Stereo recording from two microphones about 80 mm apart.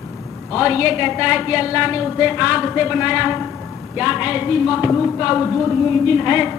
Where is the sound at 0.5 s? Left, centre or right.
Centre.